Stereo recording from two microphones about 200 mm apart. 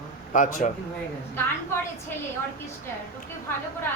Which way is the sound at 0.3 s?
40° left (ahead or behind).